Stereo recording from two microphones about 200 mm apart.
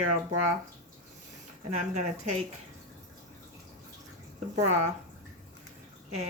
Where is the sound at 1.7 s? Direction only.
35° right (ahead or behind).